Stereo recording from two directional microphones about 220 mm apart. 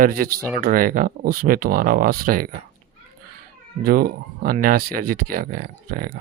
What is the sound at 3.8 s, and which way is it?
Speech, 40° right (ahead or behind).